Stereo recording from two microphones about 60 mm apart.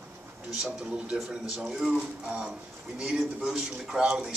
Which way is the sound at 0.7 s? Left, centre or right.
Centre.